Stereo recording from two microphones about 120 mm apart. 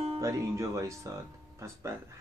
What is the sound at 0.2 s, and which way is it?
Speech, 25° right (ahead or behind).